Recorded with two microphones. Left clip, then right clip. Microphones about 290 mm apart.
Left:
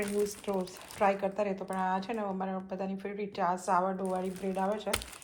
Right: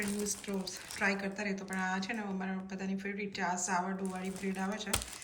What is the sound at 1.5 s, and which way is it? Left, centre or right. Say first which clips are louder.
A woman's voice: left 4 dB; centre.